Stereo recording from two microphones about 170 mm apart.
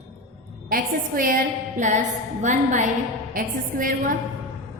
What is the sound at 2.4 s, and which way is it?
A woman's voice, 45° right (ahead or behind).